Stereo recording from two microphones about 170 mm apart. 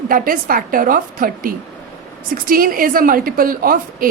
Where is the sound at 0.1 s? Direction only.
55° right (ahead or behind).